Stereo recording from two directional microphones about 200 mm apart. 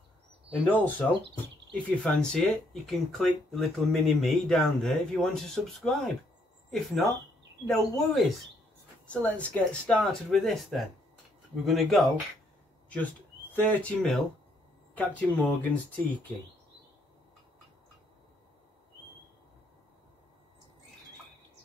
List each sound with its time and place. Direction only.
0.5 s speech: 10° left (ahead or behind)
7.6 s speech: centre (ahead or behind)